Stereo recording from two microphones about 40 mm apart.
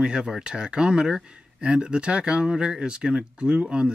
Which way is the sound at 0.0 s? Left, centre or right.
Right.